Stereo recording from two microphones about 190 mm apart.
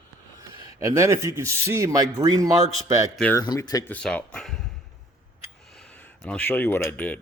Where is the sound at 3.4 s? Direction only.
20° left (ahead or behind).